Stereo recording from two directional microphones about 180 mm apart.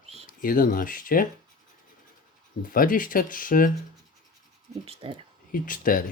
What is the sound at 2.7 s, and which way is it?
Speech, 50° left (ahead or behind).